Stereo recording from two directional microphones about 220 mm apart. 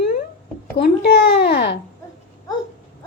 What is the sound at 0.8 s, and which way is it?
A child's voice, 50° left (ahead or behind).